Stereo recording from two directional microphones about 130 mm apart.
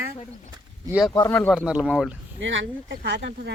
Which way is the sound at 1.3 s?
15° left (ahead or behind).